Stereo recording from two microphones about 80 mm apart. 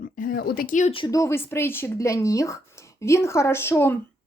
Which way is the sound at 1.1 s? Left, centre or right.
Left.